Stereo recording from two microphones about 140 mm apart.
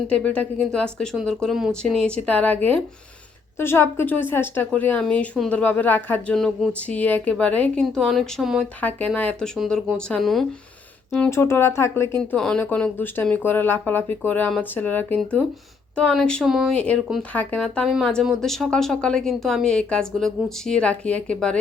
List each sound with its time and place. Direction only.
0.1 s a woman's voice: 10° left (ahead or behind)
8.8 s a woman's voice: 10° left (ahead or behind)
11.3 s a woman's voice: 20° left (ahead or behind)